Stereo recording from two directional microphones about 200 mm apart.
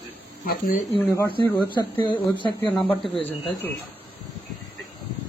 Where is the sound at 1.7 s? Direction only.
25° left (ahead or behind).